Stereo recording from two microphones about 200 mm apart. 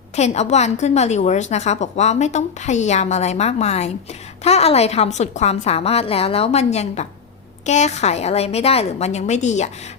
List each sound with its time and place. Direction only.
0.2 s a woman's voice: 35° left (ahead or behind)